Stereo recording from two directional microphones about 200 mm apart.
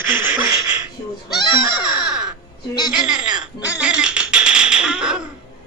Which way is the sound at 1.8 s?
5° right (ahead or behind).